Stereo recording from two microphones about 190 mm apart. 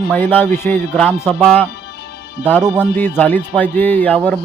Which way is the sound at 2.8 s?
10° left (ahead or behind).